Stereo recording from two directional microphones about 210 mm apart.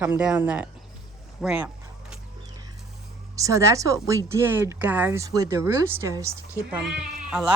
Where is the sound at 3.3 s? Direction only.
15° right (ahead or behind).